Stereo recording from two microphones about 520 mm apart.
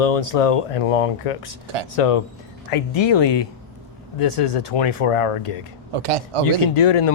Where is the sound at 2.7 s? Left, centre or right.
Left.